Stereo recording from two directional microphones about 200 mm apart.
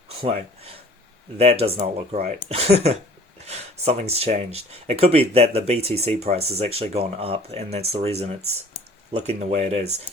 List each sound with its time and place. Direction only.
0.2 s speech: 30° right (ahead or behind)